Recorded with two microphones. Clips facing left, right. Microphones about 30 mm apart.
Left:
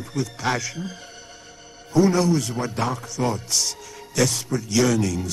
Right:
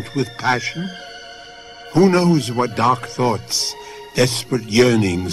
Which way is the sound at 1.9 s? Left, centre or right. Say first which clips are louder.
Right 5 dB; right.